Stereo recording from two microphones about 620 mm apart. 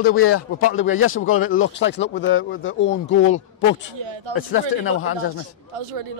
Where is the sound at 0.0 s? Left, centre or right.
Left.